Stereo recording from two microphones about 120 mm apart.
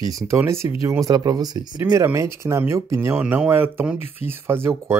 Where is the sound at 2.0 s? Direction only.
25° right (ahead or behind).